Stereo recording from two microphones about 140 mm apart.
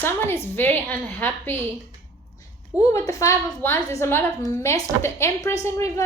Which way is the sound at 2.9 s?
20° left (ahead or behind).